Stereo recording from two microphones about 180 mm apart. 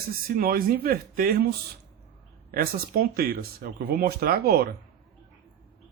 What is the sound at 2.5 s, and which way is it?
Speech, 55° right (ahead or behind).